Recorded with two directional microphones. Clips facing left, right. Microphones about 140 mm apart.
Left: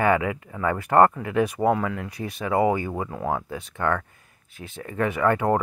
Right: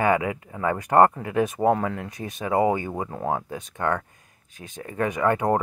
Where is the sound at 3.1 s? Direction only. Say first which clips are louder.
Even; 35° right (ahead or behind).